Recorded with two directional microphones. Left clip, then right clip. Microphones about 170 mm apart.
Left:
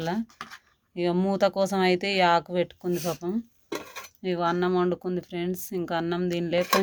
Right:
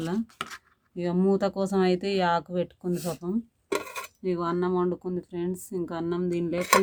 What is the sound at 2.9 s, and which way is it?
Speech, 10° left (ahead or behind).